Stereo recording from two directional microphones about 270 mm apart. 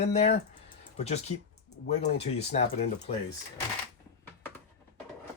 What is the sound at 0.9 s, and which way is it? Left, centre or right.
Speech, left.